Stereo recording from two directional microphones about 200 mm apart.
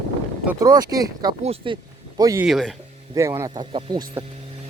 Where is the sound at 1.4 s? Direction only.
30° right (ahead or behind).